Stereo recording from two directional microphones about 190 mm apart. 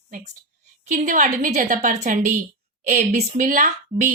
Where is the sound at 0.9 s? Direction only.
45° right (ahead or behind).